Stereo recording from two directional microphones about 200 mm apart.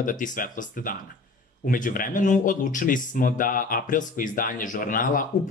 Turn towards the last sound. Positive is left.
turn(degrees=45)  # may be behind; listen again after turning